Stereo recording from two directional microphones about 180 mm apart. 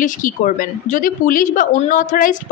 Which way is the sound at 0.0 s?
45° left (ahead or behind).